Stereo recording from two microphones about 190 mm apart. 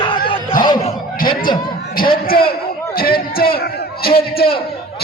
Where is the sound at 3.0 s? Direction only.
50° left (ahead or behind).